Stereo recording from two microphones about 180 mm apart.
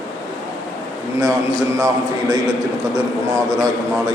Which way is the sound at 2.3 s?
20° right (ahead or behind).